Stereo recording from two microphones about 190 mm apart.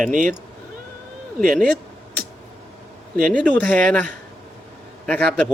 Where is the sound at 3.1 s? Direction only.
5° left (ahead or behind).